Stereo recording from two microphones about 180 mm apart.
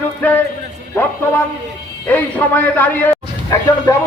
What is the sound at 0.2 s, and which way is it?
Music, 10° left (ahead or behind).